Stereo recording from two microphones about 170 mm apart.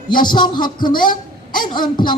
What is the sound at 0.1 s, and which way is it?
Speech, 25° left (ahead or behind).